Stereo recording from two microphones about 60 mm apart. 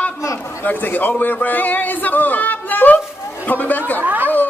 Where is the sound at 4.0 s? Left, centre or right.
Right.